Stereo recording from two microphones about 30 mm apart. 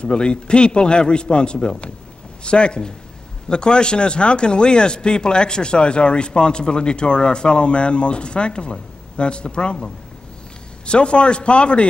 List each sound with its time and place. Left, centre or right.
0.0 s speech: left
10.9 s speech: left